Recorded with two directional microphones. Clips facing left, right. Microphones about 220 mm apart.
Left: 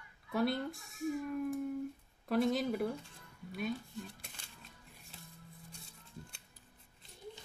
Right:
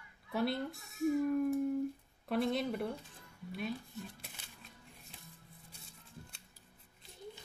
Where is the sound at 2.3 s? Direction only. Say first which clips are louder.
Left 2 dB; centre (ahead or behind).